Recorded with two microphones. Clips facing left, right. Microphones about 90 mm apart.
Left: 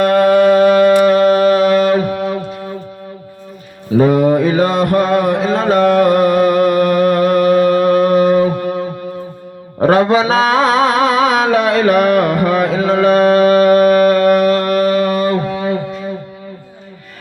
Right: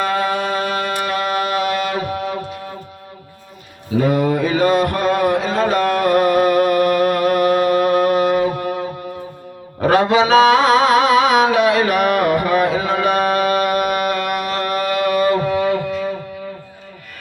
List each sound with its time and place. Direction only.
0.0 s music: 55° left (ahead or behind)
1.0 s music: 40° left (ahead or behind)
3.9 s mantra: 35° left (ahead or behind)
4.8 s a sound: 40° left (ahead or behind)
9.8 s music: 40° left (ahead or behind)